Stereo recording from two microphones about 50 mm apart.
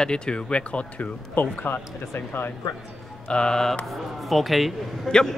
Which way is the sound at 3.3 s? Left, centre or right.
Centre.